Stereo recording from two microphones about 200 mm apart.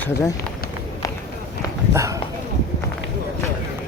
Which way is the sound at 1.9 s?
15° right (ahead or behind).